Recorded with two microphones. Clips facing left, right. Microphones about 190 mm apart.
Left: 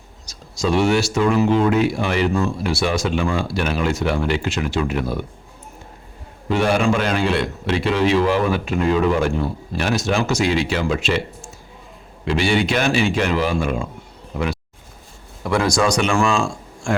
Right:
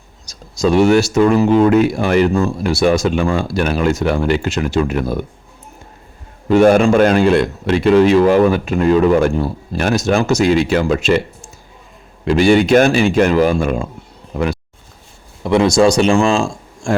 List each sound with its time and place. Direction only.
0.3 s speech: 45° right (ahead or behind)
6.5 s speech: 45° right (ahead or behind)
12.2 s speech: 45° right (ahead or behind)
15.4 s speech: 25° right (ahead or behind)